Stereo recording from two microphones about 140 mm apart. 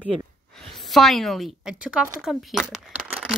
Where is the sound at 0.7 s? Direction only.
Centre (ahead or behind).